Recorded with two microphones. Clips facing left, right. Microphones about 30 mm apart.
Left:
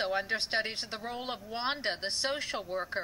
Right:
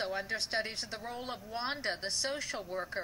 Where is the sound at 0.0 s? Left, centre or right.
Left.